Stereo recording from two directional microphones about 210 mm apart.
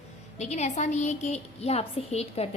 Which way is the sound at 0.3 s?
35° left (ahead or behind).